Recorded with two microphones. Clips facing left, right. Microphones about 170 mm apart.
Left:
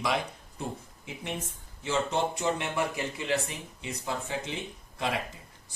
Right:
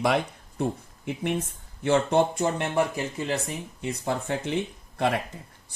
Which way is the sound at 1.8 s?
55° right (ahead or behind).